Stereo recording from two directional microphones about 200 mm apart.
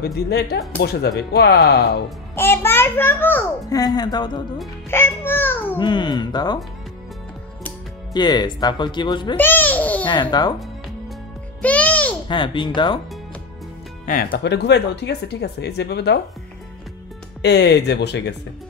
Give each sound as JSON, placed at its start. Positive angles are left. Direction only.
{"t": 0.0, "sound": "speech", "side_deg": 55}
{"t": 2.3, "sound": "a child's voice", "side_deg": 10}
{"t": 5.2, "sound": "a child's voice", "side_deg": 10}
{"t": 5.8, "sound": "speech", "side_deg": 20}
{"t": 8.1, "sound": "speech", "side_deg": 20}
{"t": 9.4, "sound": "babbling", "side_deg": 10}
{"t": 10.0, "sound": "speech", "side_deg": 20}
{"t": 11.6, "sound": "music", "side_deg": 5}
{"t": 12.3, "sound": "speech", "side_deg": 25}
{"t": 14.0, "sound": "speech", "side_deg": 45}
{"t": 17.4, "sound": "speech", "side_deg": 60}